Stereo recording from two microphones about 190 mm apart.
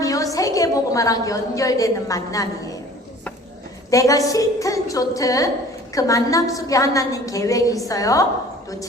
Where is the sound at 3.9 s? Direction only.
15° left (ahead or behind).